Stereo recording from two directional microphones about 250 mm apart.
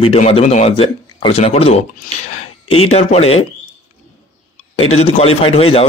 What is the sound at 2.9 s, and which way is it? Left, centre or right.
Speech, left.